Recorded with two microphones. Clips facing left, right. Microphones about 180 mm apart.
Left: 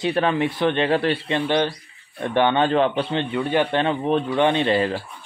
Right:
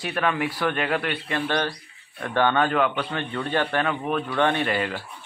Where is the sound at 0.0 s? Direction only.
25° left (ahead or behind).